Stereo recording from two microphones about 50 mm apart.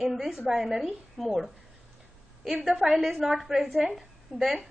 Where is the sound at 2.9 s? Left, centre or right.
Centre.